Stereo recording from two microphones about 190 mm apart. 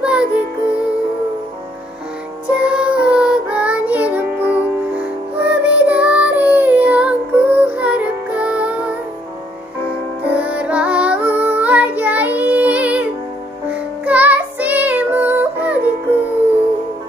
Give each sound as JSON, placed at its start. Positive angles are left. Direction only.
{"t": 0.0, "sound": "music", "side_deg": -5}
{"t": 2.6, "sound": "music", "side_deg": -5}
{"t": 10.3, "sound": "child singing", "side_deg": -5}
{"t": 14.0, "sound": "music", "side_deg": -10}